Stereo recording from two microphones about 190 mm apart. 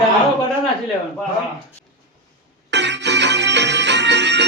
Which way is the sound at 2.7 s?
65° right (ahead or behind).